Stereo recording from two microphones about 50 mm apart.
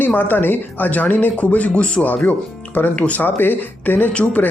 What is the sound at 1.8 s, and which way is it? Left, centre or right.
Speech, left.